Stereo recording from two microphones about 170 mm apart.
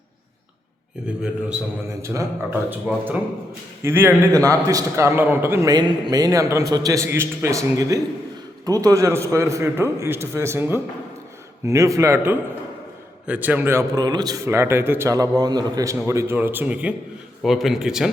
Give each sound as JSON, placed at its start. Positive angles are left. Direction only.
{"t": 1.9, "sound": "a man's voice", "side_deg": -15}